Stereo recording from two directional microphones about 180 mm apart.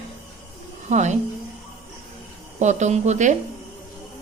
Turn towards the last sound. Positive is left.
turn(degrees=-40)  # may be behind; listen again after turning